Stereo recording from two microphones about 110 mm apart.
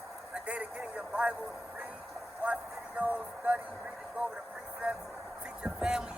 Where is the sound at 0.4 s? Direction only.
10° right (ahead or behind).